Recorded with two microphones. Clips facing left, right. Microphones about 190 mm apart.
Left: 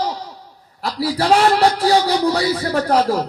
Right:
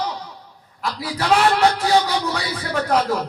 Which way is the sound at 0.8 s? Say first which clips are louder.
Left 4 dB; 35° left (ahead or behind).